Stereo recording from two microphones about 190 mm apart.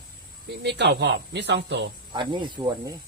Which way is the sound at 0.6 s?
65° right (ahead or behind).